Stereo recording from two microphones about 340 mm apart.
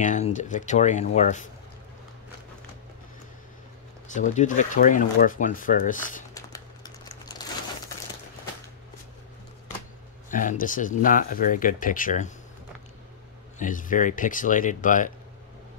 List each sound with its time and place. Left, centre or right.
0.0 s speech: left
4.1 s speech: left
6.3 s crumpling: centre
10.3 s speech: left
13.6 s speech: left